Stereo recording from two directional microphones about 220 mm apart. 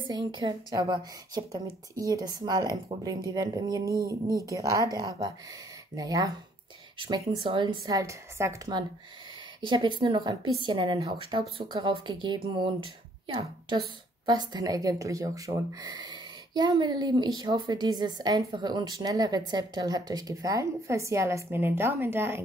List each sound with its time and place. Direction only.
0.1 s a woman's voice: 20° right (ahead or behind)